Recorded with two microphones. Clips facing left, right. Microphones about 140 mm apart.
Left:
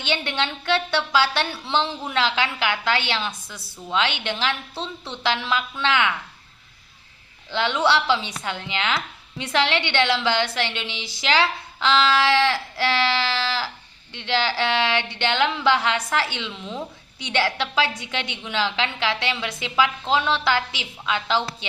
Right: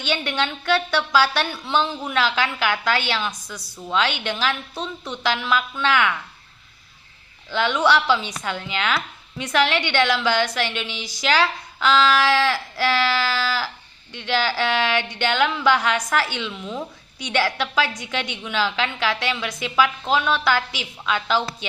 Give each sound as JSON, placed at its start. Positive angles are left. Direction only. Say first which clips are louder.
{"t": 0.0, "sound": "a woman's voice", "louder": "right 1 dB", "side_deg": 20}
{"t": 7.5, "sound": "a woman's voice", "louder": "right 2 dB", "side_deg": 25}